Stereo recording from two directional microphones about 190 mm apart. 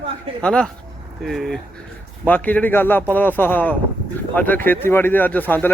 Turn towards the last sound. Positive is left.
turn(degrees=10)  # may be behind; listen again after turning